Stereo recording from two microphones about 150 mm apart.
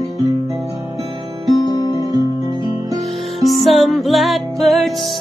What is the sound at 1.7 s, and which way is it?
Music, 25° right (ahead or behind).